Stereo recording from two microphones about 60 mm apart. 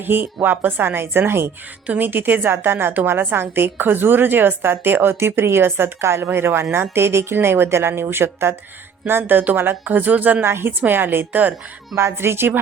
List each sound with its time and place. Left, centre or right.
0.0 s a woman's voice: right
10.4 s a woman's voice: right
11.3 s speech: right
11.9 s speech: right